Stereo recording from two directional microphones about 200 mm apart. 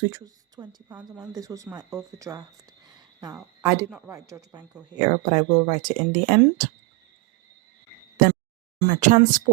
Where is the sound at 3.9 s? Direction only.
5° right (ahead or behind).